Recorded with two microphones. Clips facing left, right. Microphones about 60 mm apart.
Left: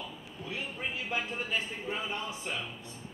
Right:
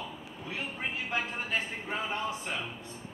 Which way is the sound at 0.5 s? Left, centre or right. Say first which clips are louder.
Right 1 dB; right.